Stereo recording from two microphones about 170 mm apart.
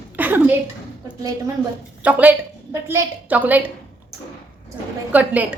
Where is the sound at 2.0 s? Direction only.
10° right (ahead or behind).